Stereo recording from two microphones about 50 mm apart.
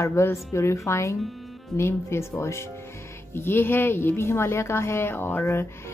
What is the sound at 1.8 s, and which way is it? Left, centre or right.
Speech, left.